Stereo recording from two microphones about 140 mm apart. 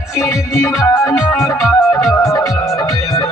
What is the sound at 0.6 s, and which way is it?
Music, 20° left (ahead or behind).